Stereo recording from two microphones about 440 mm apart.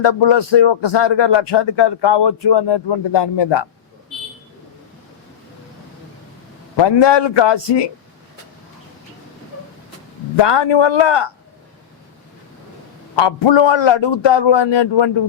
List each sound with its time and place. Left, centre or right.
0.0 s speech: left
6.7 s speech: left
10.3 s speech: left
13.1 s speech: left